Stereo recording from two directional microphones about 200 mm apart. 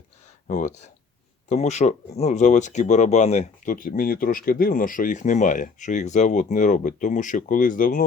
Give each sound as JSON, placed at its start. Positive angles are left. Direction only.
{"t": 0.4, "sound": "speech", "side_deg": 35}